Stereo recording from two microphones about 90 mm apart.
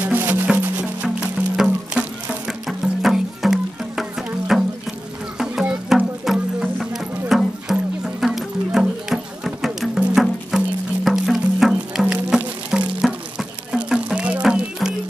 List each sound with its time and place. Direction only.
0.0 s music: 20° right (ahead or behind)
1.6 s music: 5° right (ahead or behind)